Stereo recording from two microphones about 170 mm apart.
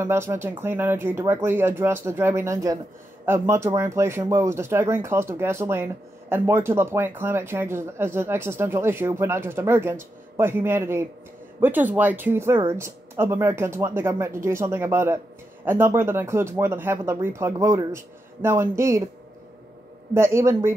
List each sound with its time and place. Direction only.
0.0 s speech: 15° right (ahead or behind)
20.2 s speech: 15° right (ahead or behind)